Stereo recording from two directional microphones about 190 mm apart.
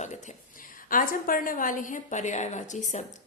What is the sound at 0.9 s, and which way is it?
A woman's voice, 45° left (ahead or behind).